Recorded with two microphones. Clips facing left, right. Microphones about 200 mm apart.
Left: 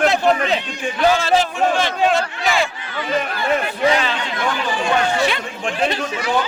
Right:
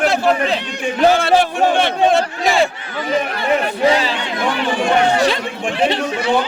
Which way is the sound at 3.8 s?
30° right (ahead or behind).